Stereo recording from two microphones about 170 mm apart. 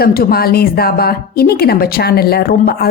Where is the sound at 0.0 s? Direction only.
60° left (ahead or behind).